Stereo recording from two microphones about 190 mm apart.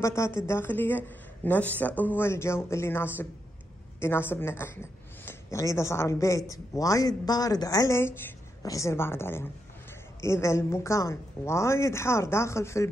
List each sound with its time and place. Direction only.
0.0 s a woman's voice: 15° left (ahead or behind)